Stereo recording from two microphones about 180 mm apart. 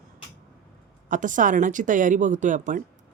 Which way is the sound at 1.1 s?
45° right (ahead or behind).